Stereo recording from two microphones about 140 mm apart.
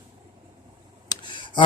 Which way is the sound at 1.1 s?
35° left (ahead or behind).